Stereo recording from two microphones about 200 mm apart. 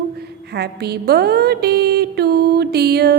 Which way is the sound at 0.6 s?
55° right (ahead or behind).